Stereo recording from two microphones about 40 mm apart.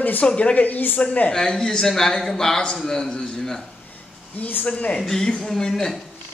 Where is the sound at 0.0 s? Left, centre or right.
Left.